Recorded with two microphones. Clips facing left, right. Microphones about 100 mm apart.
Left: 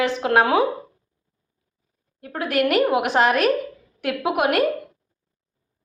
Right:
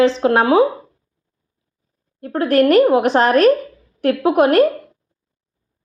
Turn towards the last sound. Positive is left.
turn(degrees=-35)  # may be behind; listen again after turning